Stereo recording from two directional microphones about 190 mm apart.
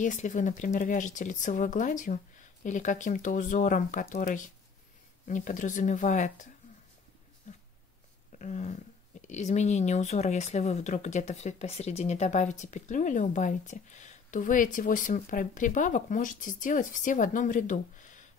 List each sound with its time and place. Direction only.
0.0 s speech: 40° left (ahead or behind)
7.5 s a sound: 40° left (ahead or behind)
8.4 s speech: 40° left (ahead or behind)